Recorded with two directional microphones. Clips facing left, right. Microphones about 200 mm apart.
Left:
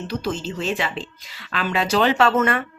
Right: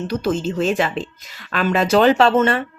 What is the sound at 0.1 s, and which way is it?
Speech, 50° right (ahead or behind).